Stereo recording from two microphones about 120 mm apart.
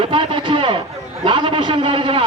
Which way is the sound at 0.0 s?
45° right (ahead or behind).